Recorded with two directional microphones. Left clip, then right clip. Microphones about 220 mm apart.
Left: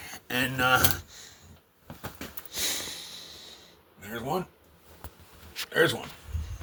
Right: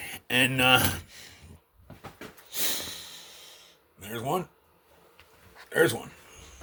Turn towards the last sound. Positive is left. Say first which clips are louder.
# even
turn(degrees=-30)  # may be behind; listen again after turning